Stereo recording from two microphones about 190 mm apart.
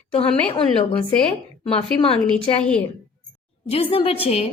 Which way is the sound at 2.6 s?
5° left (ahead or behind).